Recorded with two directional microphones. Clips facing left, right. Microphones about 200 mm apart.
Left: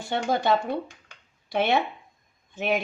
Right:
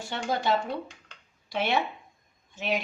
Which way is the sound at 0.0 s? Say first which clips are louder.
Left 4 dB; 55° left (ahead or behind).